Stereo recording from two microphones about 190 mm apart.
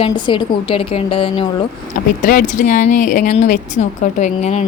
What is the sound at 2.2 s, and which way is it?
Speech, 45° left (ahead or behind).